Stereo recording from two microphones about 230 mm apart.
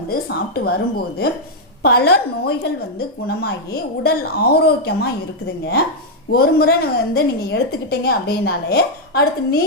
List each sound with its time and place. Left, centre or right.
0.1 s a woman's voice: left
6.3 s a woman's voice: left